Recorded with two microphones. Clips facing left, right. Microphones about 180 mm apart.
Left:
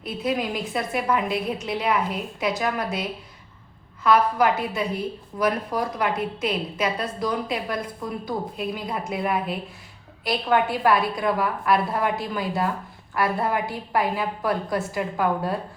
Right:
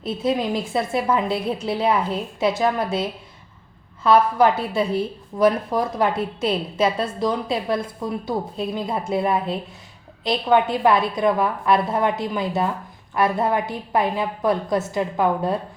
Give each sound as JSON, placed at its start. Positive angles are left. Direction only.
{"t": 0.0, "sound": "a woman's voice", "side_deg": -25}